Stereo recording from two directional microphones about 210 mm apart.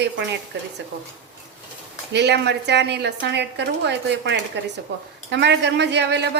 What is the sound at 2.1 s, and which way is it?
Speech, 55° right (ahead or behind).